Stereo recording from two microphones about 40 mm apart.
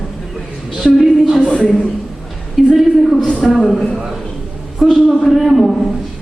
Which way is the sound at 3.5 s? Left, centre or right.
Centre.